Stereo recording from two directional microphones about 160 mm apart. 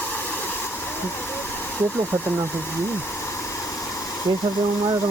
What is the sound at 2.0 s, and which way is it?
Speech, 15° right (ahead or behind).